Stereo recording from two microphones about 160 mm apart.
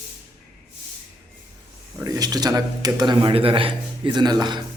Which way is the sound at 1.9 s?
20° right (ahead or behind).